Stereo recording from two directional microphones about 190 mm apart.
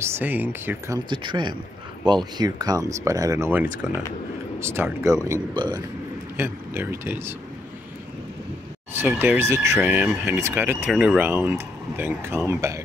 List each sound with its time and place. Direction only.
0.0 s speech: 10° right (ahead or behind)
3.8 s speech: centre (ahead or behind)
4.6 s speech: 15° right (ahead or behind)
8.9 s speech: 10° right (ahead or behind)